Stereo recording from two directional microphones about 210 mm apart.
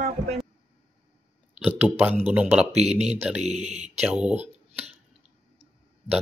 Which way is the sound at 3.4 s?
30° right (ahead or behind).